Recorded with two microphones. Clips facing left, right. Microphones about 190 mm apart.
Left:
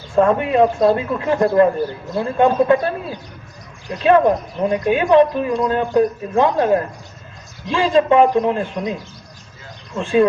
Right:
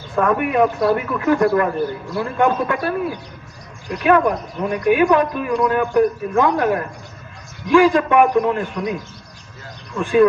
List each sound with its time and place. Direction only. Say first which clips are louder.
0.2 s speech: left 3 dB; 25° left (ahead or behind)